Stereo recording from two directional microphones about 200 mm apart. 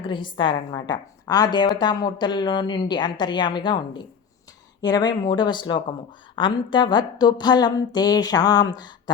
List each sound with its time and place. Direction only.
0.0 s a woman's voice: 25° left (ahead or behind)